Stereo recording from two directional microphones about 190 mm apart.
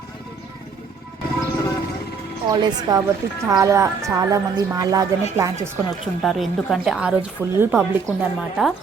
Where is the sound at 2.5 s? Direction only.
20° right (ahead or behind).